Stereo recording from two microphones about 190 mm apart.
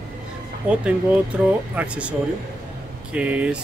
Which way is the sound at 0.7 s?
5° right (ahead or behind).